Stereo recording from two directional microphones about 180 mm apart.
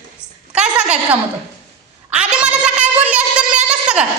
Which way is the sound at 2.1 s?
5° right (ahead or behind).